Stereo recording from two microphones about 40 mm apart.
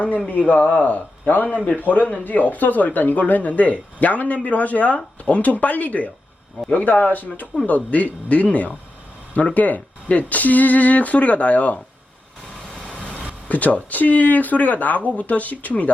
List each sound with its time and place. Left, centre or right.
0.3 s speech: left
13.1 s speech: left